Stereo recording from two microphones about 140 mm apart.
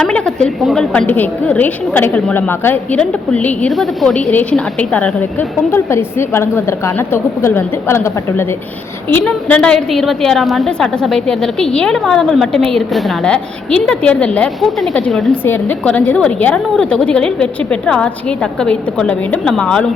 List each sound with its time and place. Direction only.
0.0 s a woman's voice: 5° left (ahead or behind)